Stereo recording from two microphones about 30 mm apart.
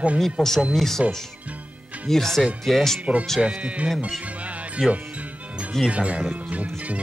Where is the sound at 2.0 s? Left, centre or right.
Centre.